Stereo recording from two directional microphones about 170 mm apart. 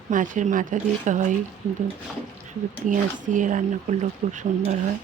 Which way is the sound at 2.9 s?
50° right (ahead or behind).